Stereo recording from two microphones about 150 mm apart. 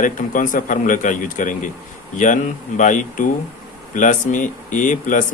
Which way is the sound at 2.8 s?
55° left (ahead or behind).